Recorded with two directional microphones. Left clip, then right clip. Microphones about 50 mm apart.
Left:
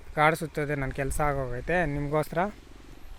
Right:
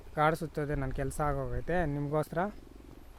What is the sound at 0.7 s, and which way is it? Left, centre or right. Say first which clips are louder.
Speech: left 5 dB; centre.